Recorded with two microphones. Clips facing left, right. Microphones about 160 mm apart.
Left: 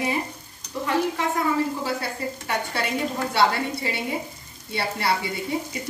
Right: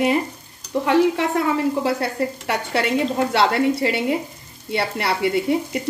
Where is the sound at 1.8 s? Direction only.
70° right (ahead or behind).